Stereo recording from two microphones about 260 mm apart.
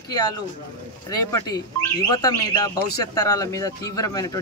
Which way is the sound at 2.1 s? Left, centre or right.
Centre.